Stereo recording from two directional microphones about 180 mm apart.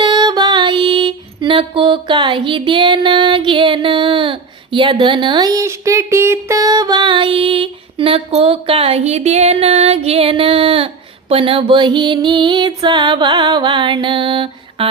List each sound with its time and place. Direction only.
0.0 s music: 25° right (ahead or behind)